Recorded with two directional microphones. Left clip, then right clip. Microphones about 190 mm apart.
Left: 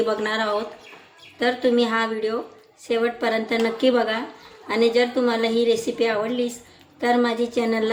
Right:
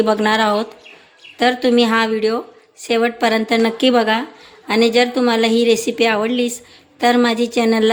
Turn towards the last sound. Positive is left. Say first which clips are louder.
# right 6 dB
turn(degrees=-55)  # may be behind; listen again after turning